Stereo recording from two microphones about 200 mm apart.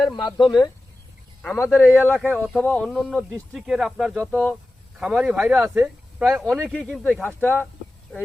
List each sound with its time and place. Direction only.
0.1 s speech: 20° left (ahead or behind)
1.4 s speech: 10° left (ahead or behind)
2.1 s speech: centre (ahead or behind)